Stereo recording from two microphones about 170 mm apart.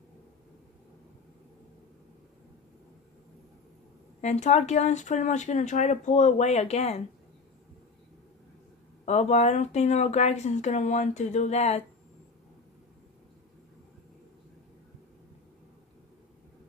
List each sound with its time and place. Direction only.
4.2 s speech: 45° left (ahead or behind)
9.0 s speech: 45° left (ahead or behind)